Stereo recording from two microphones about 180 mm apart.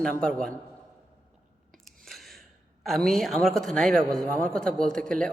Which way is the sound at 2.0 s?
Centre (ahead or behind).